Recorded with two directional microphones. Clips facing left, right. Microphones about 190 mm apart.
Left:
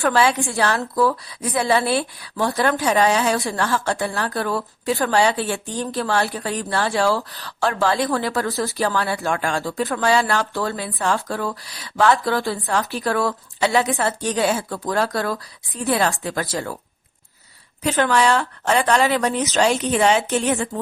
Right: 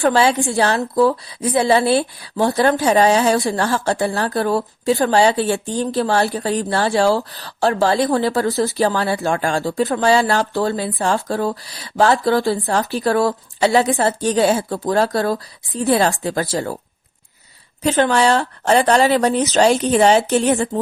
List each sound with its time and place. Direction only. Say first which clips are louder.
0.0 s a woman's voice: right 3 dB; 30° right (ahead or behind)
17.8 s speech: right 3 dB; 30° right (ahead or behind)